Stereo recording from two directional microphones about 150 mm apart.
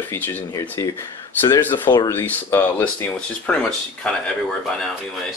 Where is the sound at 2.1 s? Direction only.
15° left (ahead or behind).